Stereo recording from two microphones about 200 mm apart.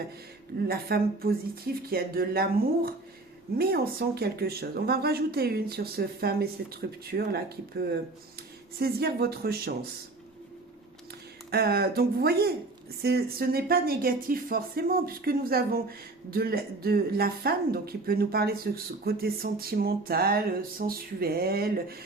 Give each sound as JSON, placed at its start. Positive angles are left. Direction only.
{"t": 0.7, "sound": "speech", "side_deg": -50}
{"t": 11.5, "sound": "speech", "side_deg": -50}